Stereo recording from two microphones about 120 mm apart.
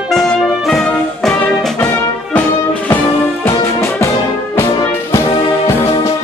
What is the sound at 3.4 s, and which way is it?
Music, 20° left (ahead or behind).